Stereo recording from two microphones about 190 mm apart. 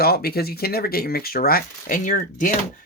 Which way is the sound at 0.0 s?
55° left (ahead or behind).